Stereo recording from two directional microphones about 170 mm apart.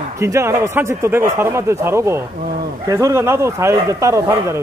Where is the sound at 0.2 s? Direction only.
15° right (ahead or behind).